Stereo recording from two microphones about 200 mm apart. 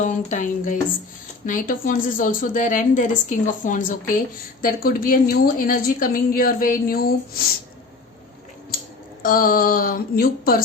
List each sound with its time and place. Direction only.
0.0 s a woman's voice: 40° left (ahead or behind)
9.2 s a woman's voice: 45° left (ahead or behind)